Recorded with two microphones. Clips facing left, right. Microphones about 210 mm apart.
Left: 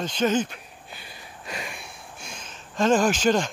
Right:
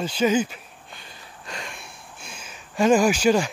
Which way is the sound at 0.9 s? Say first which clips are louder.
Left 1 dB; 10° left (ahead or behind).